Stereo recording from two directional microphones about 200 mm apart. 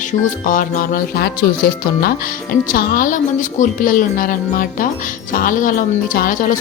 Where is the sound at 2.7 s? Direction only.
45° left (ahead or behind).